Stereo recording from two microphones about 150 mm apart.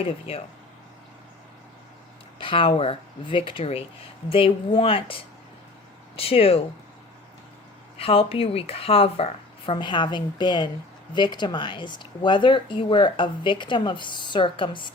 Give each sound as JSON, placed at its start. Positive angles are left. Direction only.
{"t": 0.0, "sound": "speech", "side_deg": 40}
{"t": 2.4, "sound": "speech", "side_deg": 35}
{"t": 7.9, "sound": "speech", "side_deg": 40}